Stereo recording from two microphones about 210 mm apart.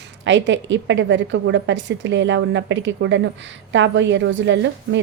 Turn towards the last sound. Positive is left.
turn(degrees=-60)  # may be behind; listen again after turning